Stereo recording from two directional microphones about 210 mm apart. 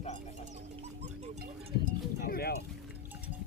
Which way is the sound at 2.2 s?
45° left (ahead or behind).